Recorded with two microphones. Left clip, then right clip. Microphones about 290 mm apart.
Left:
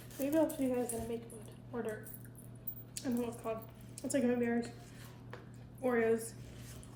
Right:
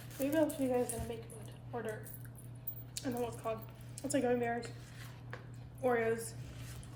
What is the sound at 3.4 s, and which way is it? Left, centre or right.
Speech, centre.